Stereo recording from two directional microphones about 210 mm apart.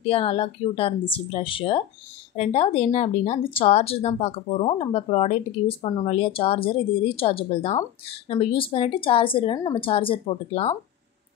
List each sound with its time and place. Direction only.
0.0 s speech: 25° left (ahead or behind)